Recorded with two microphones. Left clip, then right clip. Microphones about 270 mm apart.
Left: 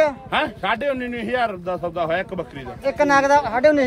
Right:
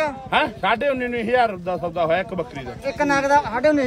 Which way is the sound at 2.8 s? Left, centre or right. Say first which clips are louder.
Left 4 dB; left.